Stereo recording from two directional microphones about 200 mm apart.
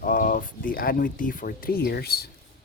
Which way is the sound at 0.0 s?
45° left (ahead or behind).